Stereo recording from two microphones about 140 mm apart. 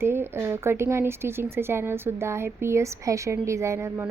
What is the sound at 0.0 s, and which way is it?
A woman's voice, 15° right (ahead or behind).